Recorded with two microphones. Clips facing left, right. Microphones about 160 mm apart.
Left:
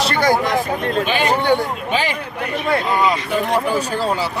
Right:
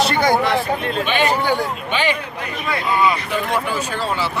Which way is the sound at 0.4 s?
45° left (ahead or behind).